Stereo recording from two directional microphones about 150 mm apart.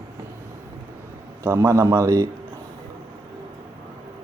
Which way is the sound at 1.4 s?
20° right (ahead or behind).